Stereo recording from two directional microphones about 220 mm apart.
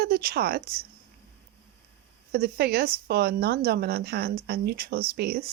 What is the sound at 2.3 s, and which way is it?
Speech, 45° right (ahead or behind).